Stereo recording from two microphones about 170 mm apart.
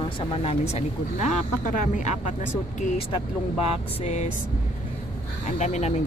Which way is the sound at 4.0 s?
40° left (ahead or behind).